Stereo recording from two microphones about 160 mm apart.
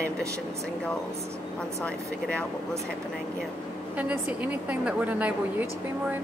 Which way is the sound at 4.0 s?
10° right (ahead or behind).